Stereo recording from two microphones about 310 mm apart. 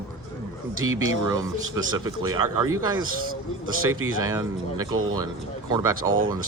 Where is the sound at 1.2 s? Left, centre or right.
Centre.